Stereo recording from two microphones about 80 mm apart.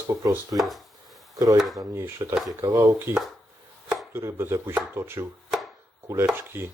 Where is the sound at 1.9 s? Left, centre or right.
Right.